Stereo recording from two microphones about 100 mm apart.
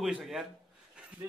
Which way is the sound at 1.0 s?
10° right (ahead or behind).